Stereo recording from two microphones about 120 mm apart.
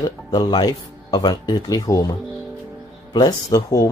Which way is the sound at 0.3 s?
35° left (ahead or behind).